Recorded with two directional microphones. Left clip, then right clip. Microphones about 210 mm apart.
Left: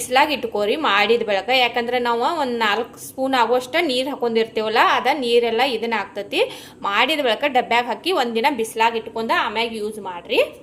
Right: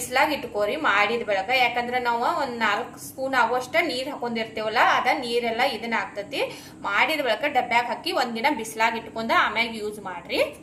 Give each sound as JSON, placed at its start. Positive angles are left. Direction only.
{"t": 0.1, "sound": "a woman's voice", "side_deg": 50}